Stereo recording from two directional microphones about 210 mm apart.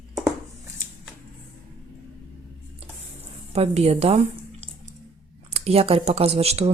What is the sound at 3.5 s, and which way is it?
Speech, 30° right (ahead or behind).